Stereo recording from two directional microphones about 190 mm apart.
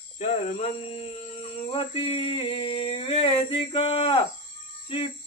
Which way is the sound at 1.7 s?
25° left (ahead or behind).